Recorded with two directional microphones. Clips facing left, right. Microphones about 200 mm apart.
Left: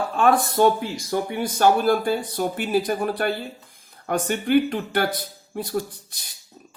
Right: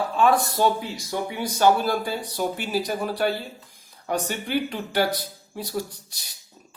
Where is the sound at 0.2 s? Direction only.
55° left (ahead or behind).